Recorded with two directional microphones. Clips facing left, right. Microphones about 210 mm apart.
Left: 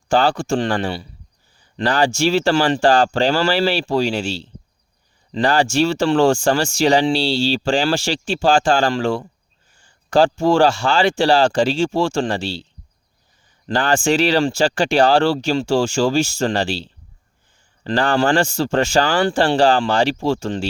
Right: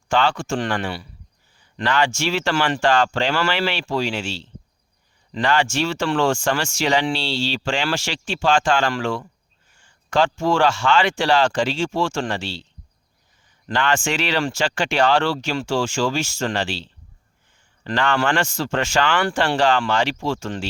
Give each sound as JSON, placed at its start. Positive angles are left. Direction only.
{"t": 0.1, "sound": "speech", "side_deg": 35}
{"t": 13.7, "sound": "speech", "side_deg": 35}
{"t": 17.9, "sound": "speech", "side_deg": 35}